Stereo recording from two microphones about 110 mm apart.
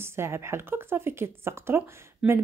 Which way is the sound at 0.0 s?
25° right (ahead or behind).